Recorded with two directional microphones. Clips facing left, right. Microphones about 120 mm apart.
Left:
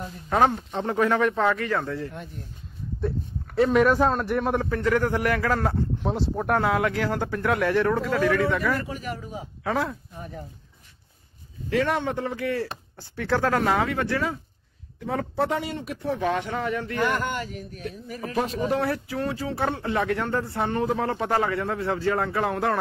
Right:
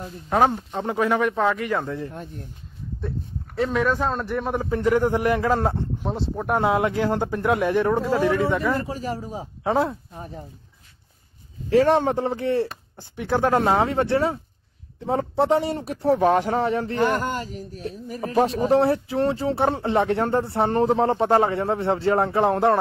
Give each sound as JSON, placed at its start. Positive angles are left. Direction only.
{"t": 0.3, "sound": "speech", "side_deg": -10}
{"t": 3.5, "sound": "speech", "side_deg": 10}
{"t": 4.6, "sound": "speech", "side_deg": -20}
{"t": 6.0, "sound": "speech", "side_deg": 0}
{"t": 6.5, "sound": "speech", "side_deg": -20}
{"t": 11.7, "sound": "speech", "side_deg": -35}
{"t": 12.9, "sound": "speech", "side_deg": -15}